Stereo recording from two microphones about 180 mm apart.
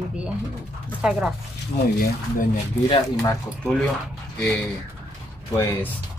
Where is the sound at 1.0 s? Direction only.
5° right (ahead or behind).